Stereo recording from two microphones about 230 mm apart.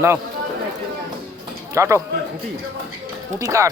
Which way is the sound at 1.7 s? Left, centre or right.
Centre.